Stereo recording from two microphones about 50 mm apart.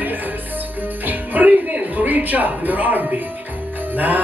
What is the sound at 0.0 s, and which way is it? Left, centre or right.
Music, right.